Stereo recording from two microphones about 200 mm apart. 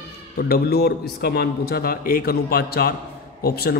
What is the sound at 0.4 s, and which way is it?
A man's voice, 50° left (ahead or behind).